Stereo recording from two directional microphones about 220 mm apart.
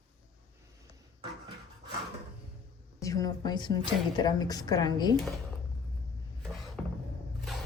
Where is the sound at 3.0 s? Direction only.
15° left (ahead or behind).